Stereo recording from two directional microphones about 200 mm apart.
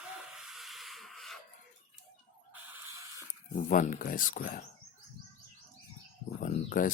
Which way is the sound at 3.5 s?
40° left (ahead or behind).